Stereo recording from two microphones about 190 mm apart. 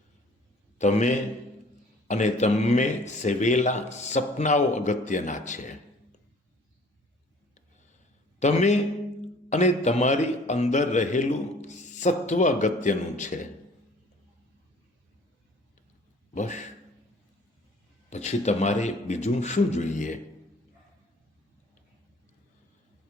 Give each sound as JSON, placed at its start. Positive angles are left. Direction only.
{"t": 0.8, "sound": "a man's voice", "side_deg": 40}
{"t": 8.4, "sound": "a man's voice", "side_deg": 35}
{"t": 16.3, "sound": "a man's voice", "side_deg": 40}
{"t": 18.1, "sound": "a man's voice", "side_deg": 35}